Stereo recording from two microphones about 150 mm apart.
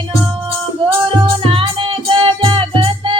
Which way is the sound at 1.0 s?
35° right (ahead or behind).